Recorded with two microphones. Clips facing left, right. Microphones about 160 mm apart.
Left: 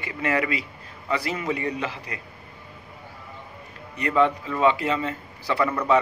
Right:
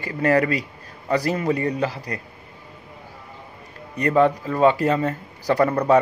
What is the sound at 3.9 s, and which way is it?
A man's voice, 40° right (ahead or behind).